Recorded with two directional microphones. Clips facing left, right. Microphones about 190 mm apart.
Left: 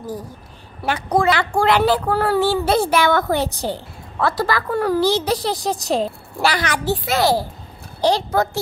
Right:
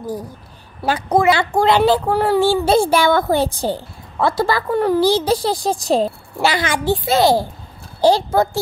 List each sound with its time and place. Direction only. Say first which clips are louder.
0.8 s a woman's voice: right 3 dB; 30° right (ahead or behind)
2.4 s a woman's voice: right 3 dB; 30° right (ahead or behind)